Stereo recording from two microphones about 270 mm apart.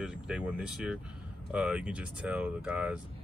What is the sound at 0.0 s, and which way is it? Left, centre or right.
Speech, centre.